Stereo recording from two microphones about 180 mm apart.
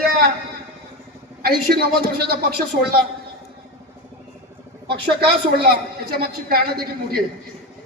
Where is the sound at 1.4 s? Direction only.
55° right (ahead or behind).